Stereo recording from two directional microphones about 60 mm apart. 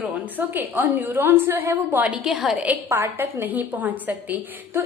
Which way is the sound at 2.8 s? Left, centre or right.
Right.